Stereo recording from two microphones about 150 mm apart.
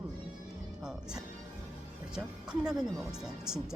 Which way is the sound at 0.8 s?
5° right (ahead or behind).